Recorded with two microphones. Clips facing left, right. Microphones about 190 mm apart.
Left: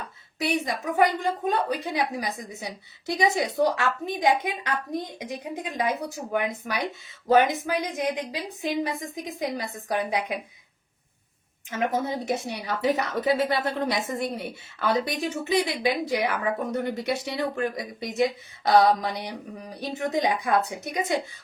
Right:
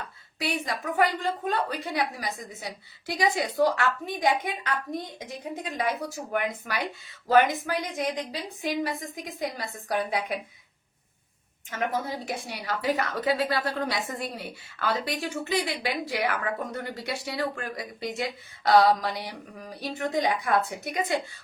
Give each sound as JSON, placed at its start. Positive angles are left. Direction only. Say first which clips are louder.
{"t": 0.0, "sound": "a woman's voice", "louder": "left 3 dB", "side_deg": 20}
{"t": 9.4, "sound": "a woman's voice", "louder": "left 2 dB", "side_deg": 20}
{"t": 11.7, "sound": "a woman's voice", "louder": "left 3 dB", "side_deg": 20}